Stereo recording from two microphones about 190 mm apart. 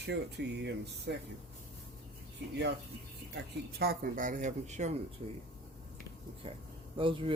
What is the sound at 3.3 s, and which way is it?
Speech, 55° right (ahead or behind).